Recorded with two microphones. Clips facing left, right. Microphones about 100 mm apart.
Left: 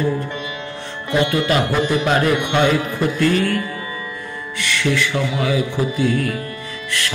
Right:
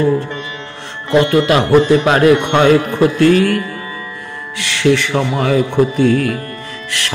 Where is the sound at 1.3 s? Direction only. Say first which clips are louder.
Right 7 dB; 65° right (ahead or behind).